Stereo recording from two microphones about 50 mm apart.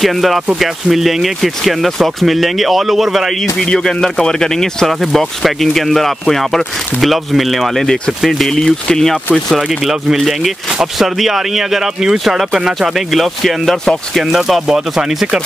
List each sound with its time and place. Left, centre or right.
0.0 s speech: centre
3.6 s speech: centre
10.2 s speech: centre